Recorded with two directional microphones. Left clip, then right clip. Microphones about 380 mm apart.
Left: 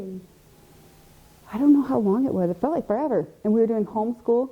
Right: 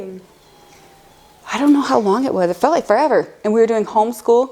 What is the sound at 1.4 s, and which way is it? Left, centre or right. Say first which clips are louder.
Speech: right 5 dB; centre.